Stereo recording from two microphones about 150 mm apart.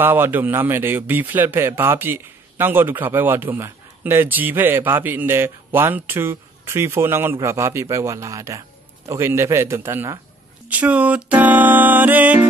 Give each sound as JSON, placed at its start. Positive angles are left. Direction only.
{"t": 0.0, "sound": "a man's voice", "side_deg": -15}